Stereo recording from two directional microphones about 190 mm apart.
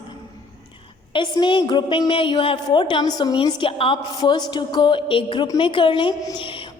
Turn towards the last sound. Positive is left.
turn(degrees=25)  # may be behind; listen again after turning